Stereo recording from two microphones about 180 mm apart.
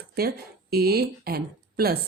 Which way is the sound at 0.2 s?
60° right (ahead or behind).